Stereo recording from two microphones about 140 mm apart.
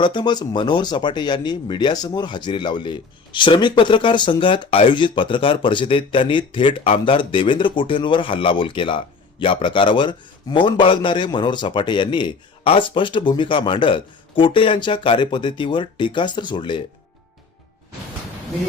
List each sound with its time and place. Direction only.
0.0 s speech: 35° left (ahead or behind)